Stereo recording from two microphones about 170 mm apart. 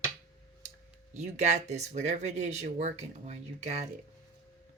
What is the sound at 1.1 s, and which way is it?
Speech, 45° right (ahead or behind).